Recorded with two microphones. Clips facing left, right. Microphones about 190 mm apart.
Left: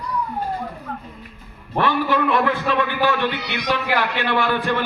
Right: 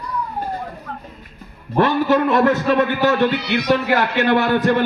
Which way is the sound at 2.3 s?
45° right (ahead or behind).